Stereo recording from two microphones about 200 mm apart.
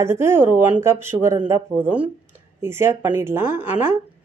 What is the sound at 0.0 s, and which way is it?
Speech, 10° right (ahead or behind).